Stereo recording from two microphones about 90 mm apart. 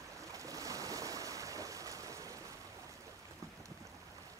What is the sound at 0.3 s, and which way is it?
Waves, 40° right (ahead or behind).